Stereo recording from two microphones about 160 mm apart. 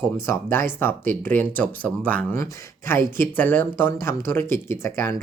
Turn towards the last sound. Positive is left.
turn(degrees=15)  # may be behind; listen again after turning